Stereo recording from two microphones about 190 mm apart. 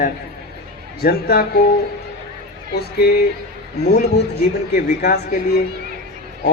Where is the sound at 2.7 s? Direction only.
55° left (ahead or behind).